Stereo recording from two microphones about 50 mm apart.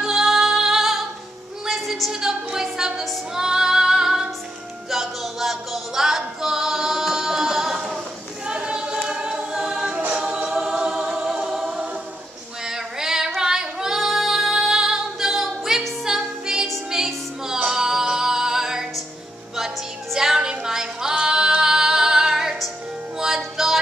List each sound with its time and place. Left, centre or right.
0.0 s music: centre
1.7 s a sound: centre
3.3 s female singing: centre
4.9 s a capella: centre
8.5 s choir: centre
12.6 s female singing: centre
16.1 s music: centre